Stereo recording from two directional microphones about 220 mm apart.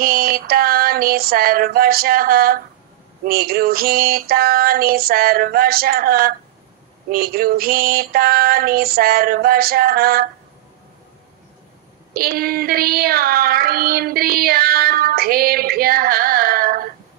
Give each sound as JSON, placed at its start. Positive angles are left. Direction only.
{"t": 0.0, "sound": "child singing", "side_deg": -40}
{"t": 12.1, "sound": "child singing", "side_deg": -40}